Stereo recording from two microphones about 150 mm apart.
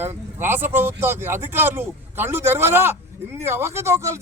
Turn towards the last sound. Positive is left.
turn(degrees=-15)  # may be behind; listen again after turning